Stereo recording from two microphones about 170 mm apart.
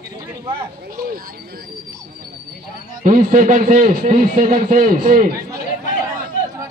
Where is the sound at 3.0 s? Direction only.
50° right (ahead or behind).